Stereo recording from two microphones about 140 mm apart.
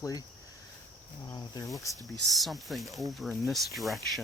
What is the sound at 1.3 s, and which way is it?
Speech, 30° left (ahead or behind).